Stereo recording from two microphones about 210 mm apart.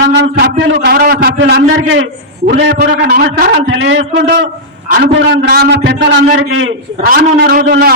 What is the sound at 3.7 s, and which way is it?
A man's voice, 60° right (ahead or behind).